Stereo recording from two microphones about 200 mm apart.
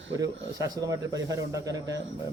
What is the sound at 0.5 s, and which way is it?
Speech, 15° right (ahead or behind).